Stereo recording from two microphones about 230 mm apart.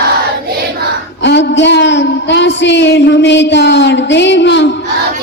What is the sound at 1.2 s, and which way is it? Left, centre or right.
A man's voice, left.